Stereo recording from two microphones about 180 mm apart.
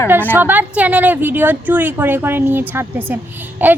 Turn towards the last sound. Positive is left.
turn(degrees=-10)  # may be behind; listen again after turning